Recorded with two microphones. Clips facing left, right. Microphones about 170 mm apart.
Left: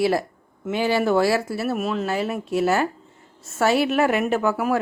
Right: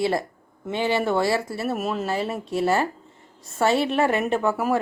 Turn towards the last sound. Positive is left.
turn(degrees=0)  # may be behind; listen again after turning